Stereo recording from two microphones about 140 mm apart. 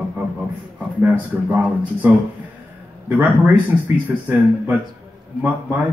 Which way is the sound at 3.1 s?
10° right (ahead or behind).